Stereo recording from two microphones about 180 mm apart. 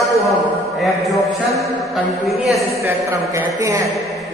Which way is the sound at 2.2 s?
Centre (ahead or behind).